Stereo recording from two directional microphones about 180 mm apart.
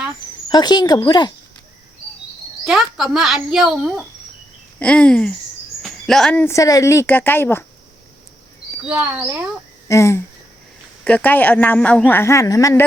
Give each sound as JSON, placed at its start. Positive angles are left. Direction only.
{"t": 0.5, "sound": "speech", "side_deg": 25}
{"t": 2.6, "sound": "speech", "side_deg": 0}
{"t": 8.9, "sound": "speech", "side_deg": -10}
{"t": 9.9, "sound": "speech", "side_deg": 15}